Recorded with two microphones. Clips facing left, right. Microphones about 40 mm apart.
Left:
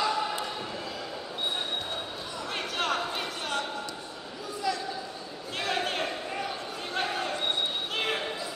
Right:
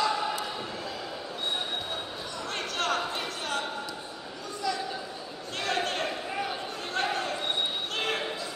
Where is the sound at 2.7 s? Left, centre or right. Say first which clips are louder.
Even; centre.